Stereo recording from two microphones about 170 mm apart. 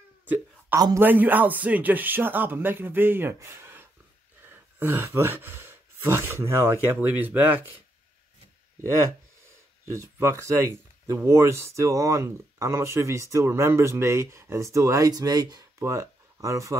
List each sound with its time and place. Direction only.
0.7 s a man's voice: 20° right (ahead or behind)
1.0 s speech: 10° right (ahead or behind)
9.8 s speech: 15° right (ahead or behind)